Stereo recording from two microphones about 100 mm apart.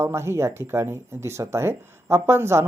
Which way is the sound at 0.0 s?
25° right (ahead or behind).